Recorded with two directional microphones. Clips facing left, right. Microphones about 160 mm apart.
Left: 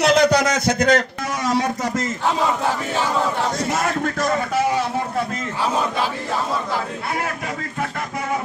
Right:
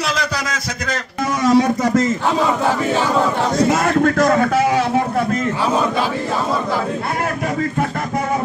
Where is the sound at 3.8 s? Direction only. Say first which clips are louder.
Right 7 dB; 90° right; by 5.4 s 60° right (ahead or behind).